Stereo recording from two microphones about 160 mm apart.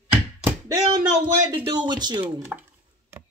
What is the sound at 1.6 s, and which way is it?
Speech, 30° right (ahead or behind).